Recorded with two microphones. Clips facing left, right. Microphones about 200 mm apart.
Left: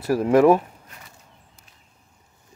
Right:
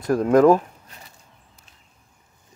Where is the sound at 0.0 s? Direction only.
5° left (ahead or behind).